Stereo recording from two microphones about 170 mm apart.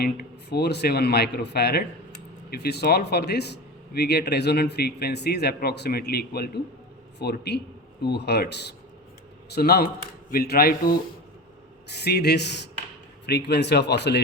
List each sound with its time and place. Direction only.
0.0 s a man's voice: 70° left (ahead or behind)
9.6 s a man's voice: 65° left (ahead or behind)
11.9 s a man's voice: 75° left (ahead or behind)